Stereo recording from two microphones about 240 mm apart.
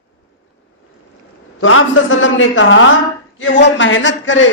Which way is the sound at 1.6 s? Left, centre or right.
Left.